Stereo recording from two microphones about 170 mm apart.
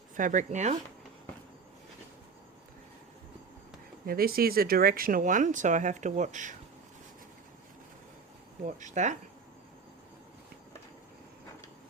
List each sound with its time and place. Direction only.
0.2 s speech: 50° right (ahead or behind)
4.0 s speech: 60° right (ahead or behind)
8.6 s speech: 45° right (ahead or behind)